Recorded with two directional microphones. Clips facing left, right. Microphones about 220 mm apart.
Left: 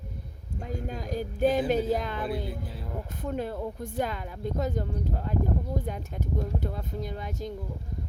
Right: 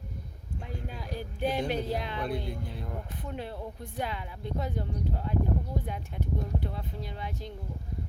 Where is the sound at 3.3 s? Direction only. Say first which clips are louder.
Left 6 dB; 45° left (ahead or behind).